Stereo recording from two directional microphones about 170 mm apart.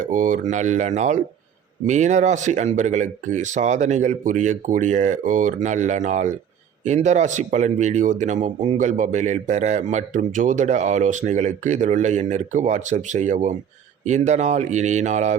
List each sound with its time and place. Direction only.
0.0 s speech: 50° right (ahead or behind)